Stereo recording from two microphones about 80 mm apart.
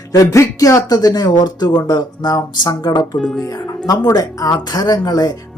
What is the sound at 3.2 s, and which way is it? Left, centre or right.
Speech, centre.